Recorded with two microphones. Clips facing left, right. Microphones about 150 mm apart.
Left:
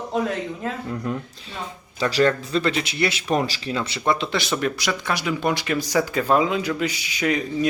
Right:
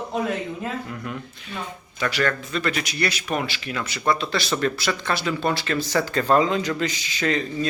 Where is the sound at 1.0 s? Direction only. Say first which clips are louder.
Left 5 dB; 30° left (ahead or behind).